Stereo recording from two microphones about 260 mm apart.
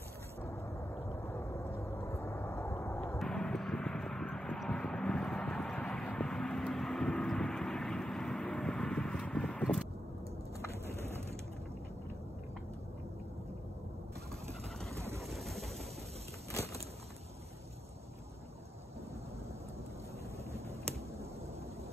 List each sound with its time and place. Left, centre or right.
1.2 s vehicle: centre
15.0 s vehicle: centre
15.2 s a sound: centre